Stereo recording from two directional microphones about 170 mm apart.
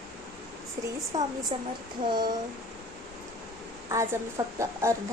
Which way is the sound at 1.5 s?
35° right (ahead or behind).